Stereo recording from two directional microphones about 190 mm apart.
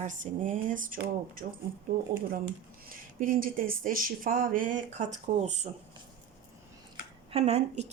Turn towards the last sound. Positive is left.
turn(degrees=-35)  # may be behind; listen again after turning